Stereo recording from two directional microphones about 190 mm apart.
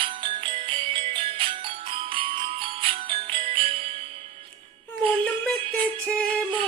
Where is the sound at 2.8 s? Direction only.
30° right (ahead or behind).